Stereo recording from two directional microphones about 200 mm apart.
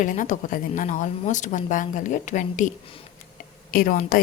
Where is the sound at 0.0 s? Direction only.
40° left (ahead or behind).